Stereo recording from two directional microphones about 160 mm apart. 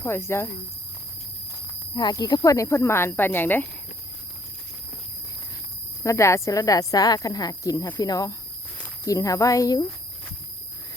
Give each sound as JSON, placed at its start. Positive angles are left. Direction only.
{"t": 0.0, "sound": "speech", "side_deg": 15}
{"t": 2.0, "sound": "speech", "side_deg": 25}
{"t": 6.0, "sound": "speech", "side_deg": 20}